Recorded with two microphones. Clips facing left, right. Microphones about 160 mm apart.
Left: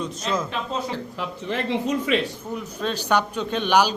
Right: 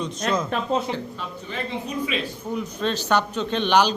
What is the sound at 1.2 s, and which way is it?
A man's voice, 80° left.